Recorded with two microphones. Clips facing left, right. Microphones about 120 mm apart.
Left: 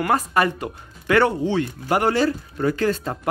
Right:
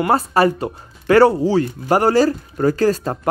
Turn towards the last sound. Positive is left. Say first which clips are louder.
# right 5 dB
turn(degrees=-40)  # may be behind; listen again after turning